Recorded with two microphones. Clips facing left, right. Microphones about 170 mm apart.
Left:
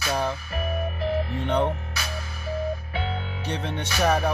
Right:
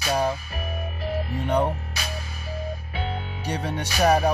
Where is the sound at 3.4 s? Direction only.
10° right (ahead or behind).